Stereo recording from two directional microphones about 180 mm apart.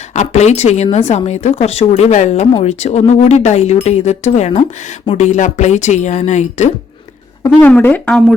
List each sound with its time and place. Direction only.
0.1 s speech: 40° left (ahead or behind)
7.6 s speech: 10° left (ahead or behind)